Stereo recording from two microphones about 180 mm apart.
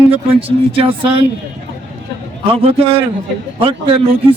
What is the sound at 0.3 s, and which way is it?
Speech, 30° right (ahead or behind).